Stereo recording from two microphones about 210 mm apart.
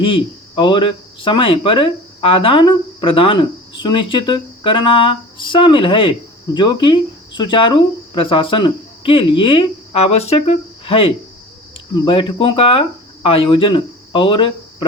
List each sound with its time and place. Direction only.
0.0 s speech: 25° left (ahead or behind)